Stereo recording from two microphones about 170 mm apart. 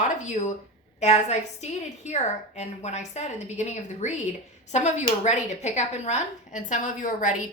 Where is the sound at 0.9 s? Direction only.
40° left (ahead or behind).